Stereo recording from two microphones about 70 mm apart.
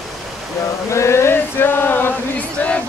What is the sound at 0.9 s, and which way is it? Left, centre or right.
Chant, left.